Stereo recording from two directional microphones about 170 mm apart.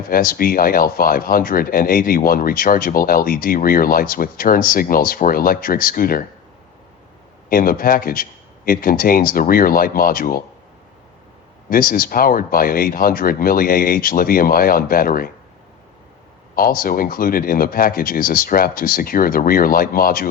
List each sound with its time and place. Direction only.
0.1 s speech: 60° left (ahead or behind)
7.5 s speech: 55° left (ahead or behind)
11.7 s speech: 55° left (ahead or behind)
16.6 s speech: 60° left (ahead or behind)